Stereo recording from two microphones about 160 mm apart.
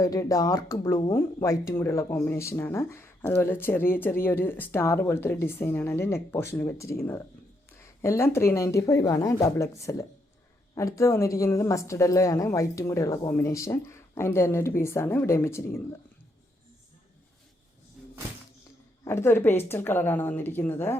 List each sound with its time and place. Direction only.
0.0 s a woman's voice: 20° left (ahead or behind)
19.0 s speech: 15° left (ahead or behind)